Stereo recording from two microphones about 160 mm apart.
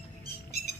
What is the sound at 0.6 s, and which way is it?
Music, 75° left (ahead or behind).